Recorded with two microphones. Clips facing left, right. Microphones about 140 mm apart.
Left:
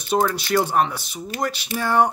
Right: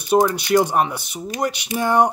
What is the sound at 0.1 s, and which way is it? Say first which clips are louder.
Speech: right 4 dB; 15° right (ahead or behind).